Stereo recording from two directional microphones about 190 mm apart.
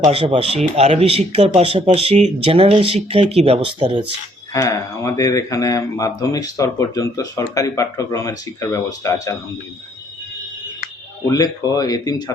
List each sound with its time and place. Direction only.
0.0 s speech: 30° right (ahead or behind)
4.5 s speech: 15° left (ahead or behind)
11.3 s speech: 20° left (ahead or behind)